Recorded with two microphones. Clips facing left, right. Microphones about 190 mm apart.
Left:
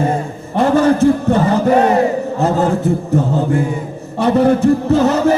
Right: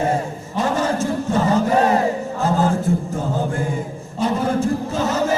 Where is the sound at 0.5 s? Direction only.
60° left (ahead or behind).